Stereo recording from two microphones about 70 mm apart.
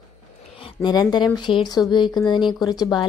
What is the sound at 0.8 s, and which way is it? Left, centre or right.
Speech, left.